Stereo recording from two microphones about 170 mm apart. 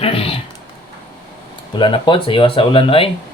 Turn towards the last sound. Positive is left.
turn(degrees=30)  # may be behind; listen again after turning